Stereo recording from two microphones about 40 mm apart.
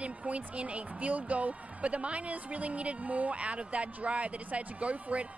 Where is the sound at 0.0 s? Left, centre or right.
Right.